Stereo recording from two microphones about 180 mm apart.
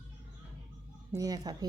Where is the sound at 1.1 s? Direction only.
20° right (ahead or behind).